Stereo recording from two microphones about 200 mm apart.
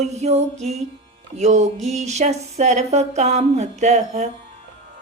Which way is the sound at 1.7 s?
Centre (ahead or behind).